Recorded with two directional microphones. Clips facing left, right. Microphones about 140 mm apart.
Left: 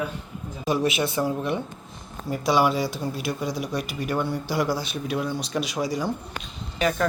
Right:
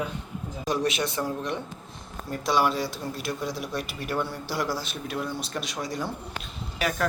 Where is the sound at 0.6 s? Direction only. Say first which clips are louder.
Left 3 dB; 5° left (ahead or behind).